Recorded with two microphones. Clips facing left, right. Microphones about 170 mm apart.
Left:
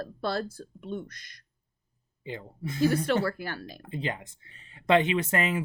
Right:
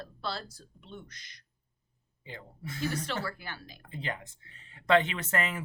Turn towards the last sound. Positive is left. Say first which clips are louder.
# left 6 dB
turn(degrees=15)  # may be behind; listen again after turning